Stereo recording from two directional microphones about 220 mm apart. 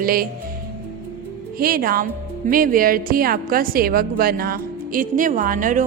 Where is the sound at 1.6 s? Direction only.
40° right (ahead or behind).